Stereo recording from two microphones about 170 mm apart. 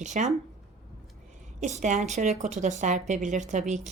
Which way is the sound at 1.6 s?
45° right (ahead or behind).